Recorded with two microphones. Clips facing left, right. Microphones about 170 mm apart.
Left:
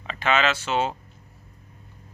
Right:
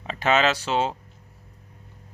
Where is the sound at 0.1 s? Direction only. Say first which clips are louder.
Right 2 dB; 40° right (ahead or behind).